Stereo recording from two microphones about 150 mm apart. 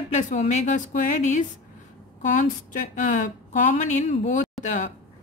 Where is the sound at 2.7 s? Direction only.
60° left (ahead or behind).